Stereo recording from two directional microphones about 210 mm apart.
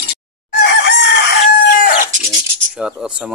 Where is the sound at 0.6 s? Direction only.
55° left (ahead or behind).